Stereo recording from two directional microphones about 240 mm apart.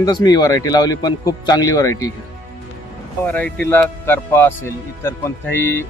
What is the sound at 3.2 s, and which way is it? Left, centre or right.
A man's voice, centre.